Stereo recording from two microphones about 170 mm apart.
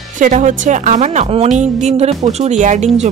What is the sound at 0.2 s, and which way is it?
A woman's voice, 50° right (ahead or behind).